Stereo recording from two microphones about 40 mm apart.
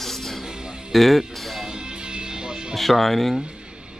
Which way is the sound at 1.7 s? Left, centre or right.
Right.